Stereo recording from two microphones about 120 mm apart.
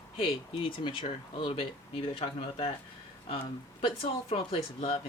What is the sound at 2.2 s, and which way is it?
Speech, 55° left (ahead or behind).